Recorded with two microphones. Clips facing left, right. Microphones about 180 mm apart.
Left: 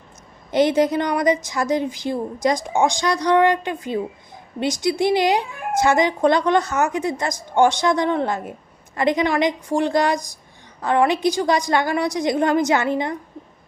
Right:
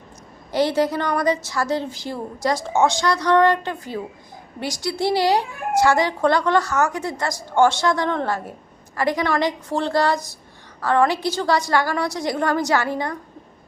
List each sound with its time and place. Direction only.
0.5 s a woman's voice: 20° left (ahead or behind)